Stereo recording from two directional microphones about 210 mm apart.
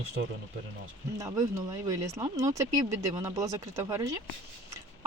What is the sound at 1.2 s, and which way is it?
Speech, 15° right (ahead or behind).